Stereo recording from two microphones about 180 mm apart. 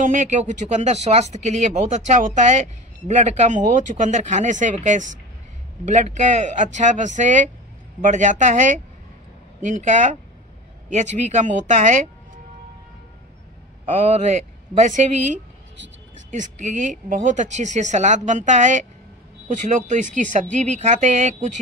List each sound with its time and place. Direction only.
0.0 s speech: 45° right (ahead or behind)
13.8 s speech: 40° right (ahead or behind)